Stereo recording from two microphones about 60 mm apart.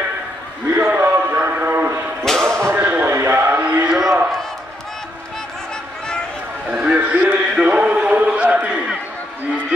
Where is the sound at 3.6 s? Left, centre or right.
Right.